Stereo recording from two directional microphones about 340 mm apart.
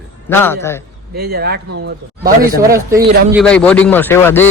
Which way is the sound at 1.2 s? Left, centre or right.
Right.